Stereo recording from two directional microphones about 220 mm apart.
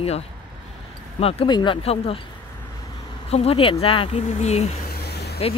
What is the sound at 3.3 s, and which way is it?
Speech, 25° left (ahead or behind).